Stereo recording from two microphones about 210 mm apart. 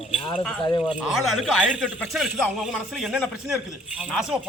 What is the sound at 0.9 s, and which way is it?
A man's voice, 5° right (ahead or behind).